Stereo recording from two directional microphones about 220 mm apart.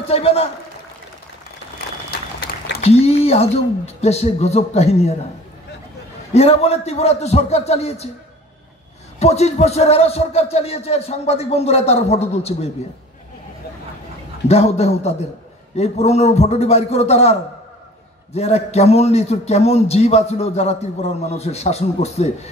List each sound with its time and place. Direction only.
0.0 s a man's voice: 25° left (ahead or behind)
2.0 s applause: 45° left (ahead or behind)
2.8 s a man's voice: 30° left (ahead or behind)
6.3 s a man's voice: 25° left (ahead or behind)
9.2 s a man's voice: 30° left (ahead or behind)
14.5 s a man's voice: 30° left (ahead or behind)